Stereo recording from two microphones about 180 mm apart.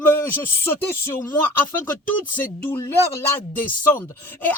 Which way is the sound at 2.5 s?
10° left (ahead or behind).